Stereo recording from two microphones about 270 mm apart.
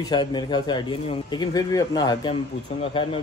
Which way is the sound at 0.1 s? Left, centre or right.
Centre.